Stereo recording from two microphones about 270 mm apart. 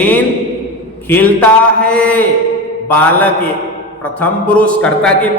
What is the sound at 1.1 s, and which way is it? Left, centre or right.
A man's voice, centre.